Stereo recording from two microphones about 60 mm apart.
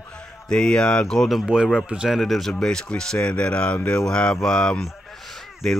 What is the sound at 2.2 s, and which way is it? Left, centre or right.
Speech, centre.